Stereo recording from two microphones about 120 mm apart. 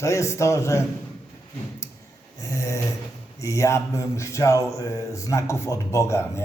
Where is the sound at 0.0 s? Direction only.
25° left (ahead or behind).